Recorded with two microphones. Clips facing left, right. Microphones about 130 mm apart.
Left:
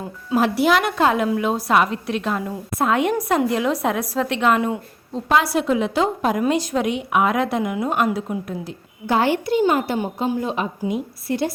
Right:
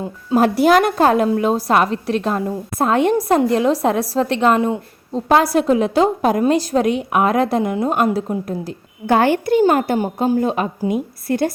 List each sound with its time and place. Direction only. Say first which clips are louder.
0.3 s a woman's voice: right 4 dB; 45° right (ahead or behind)
9.0 s a woman's voice: right 4 dB; 55° right (ahead or behind)